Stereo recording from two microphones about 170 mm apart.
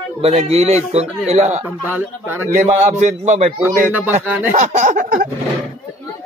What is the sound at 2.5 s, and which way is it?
Speech, 45° right (ahead or behind).